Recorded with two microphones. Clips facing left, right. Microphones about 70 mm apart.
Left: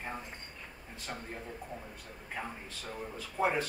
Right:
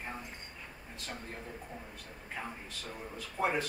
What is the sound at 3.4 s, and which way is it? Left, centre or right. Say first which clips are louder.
Speech: left 2 dB; centre.